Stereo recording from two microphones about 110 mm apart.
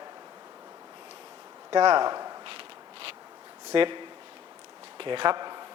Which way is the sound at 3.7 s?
45° right (ahead or behind).